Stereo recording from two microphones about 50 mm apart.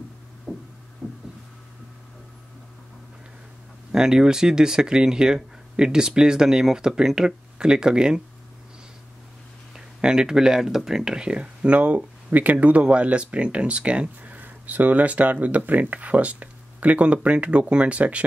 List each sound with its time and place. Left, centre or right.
0.5 s heart sounds: centre
1.0 s a sound: centre
3.9 s speech: centre
9.8 s speech: centre